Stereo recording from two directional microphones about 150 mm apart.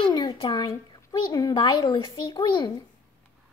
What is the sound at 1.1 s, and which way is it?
A child's voice, 25° left (ahead or behind).